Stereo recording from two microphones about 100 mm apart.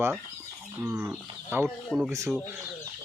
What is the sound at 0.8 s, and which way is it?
Speech, 20° right (ahead or behind).